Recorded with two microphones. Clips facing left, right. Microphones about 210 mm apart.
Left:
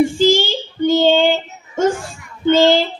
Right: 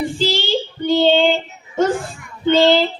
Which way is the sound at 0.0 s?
45° left (ahead or behind).